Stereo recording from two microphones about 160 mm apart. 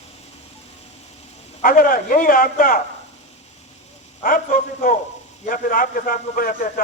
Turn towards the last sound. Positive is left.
turn(degrees=60)  # may be behind; listen again after turning